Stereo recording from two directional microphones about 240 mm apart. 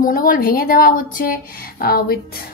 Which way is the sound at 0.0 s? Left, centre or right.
Left.